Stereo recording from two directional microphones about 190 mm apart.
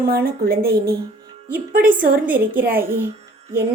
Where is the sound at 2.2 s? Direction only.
10° right (ahead or behind).